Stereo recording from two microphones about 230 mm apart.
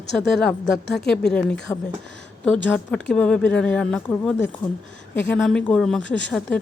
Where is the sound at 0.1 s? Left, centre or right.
Centre.